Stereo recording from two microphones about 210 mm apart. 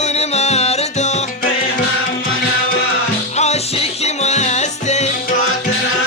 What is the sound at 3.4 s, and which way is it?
Music, 30° left (ahead or behind).